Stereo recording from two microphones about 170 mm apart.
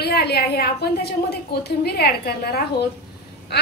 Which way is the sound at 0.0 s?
70° left (ahead or behind).